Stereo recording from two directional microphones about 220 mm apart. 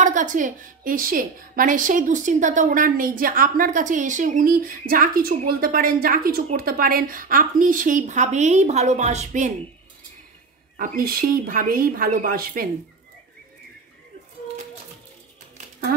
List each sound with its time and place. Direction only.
0.0 s a woman's voice: 35° right (ahead or behind)
10.8 s a woman's voice: 40° right (ahead or behind)